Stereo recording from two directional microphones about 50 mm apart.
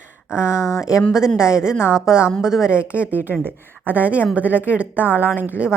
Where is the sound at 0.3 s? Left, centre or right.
Left.